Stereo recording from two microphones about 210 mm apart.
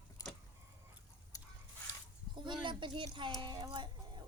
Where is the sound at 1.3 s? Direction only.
15° left (ahead or behind).